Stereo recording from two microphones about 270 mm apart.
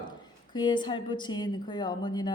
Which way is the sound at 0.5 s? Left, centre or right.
Centre.